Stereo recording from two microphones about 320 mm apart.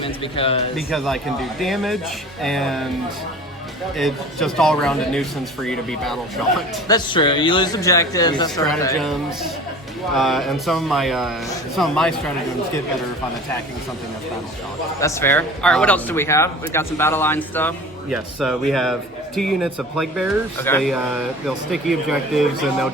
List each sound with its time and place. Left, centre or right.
0.0 s speech: centre
0.8 s speech: centre
3.9 s speech: centre
6.8 s speech: centre
15.0 s speech: centre